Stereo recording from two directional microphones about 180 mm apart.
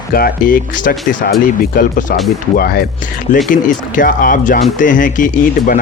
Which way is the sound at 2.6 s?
60° left (ahead or behind).